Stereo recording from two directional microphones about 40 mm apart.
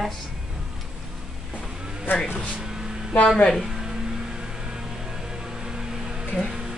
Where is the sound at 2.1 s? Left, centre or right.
Left.